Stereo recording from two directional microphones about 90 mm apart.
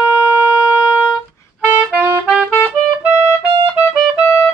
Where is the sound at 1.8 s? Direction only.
15° right (ahead or behind).